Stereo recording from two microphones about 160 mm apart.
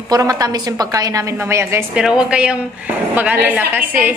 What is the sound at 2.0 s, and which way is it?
A woman's voice, 5° right (ahead or behind).